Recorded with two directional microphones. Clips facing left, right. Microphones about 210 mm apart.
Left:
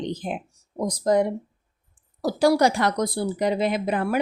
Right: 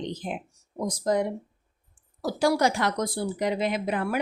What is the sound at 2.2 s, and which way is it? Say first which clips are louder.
A woman's voice: left 4 dB; 35° left (ahead or behind).